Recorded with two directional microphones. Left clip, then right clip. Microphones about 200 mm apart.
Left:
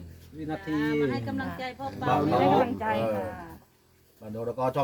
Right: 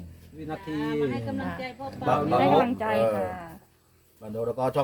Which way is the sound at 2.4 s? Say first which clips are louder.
Right 2 dB; 45° right (ahead or behind).